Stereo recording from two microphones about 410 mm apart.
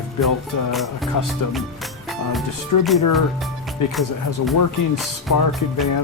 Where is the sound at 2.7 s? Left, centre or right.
Left.